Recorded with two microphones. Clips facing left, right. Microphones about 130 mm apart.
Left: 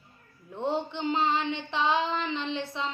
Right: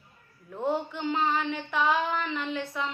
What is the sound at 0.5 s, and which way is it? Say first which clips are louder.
Female singing: right 1 dB; 25° left (ahead or behind).